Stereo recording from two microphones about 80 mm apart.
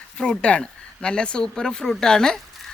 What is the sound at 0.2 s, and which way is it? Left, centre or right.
Speech, centre.